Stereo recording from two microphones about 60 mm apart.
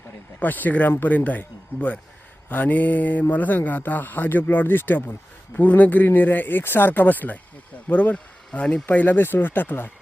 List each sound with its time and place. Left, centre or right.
0.3 s speech: left
8.9 s speech: left